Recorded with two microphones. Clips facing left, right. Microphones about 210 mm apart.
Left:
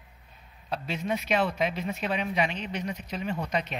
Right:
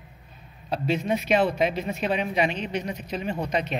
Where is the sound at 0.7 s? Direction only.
30° right (ahead or behind).